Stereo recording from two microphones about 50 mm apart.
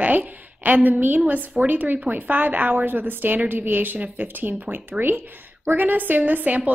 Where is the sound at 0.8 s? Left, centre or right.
Right.